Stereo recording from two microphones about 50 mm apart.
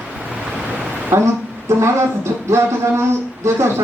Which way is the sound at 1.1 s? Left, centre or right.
Right.